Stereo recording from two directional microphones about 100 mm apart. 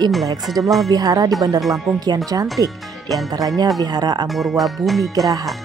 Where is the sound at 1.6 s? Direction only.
Centre (ahead or behind).